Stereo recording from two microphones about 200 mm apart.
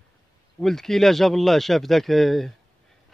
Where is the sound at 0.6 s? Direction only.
Centre (ahead or behind).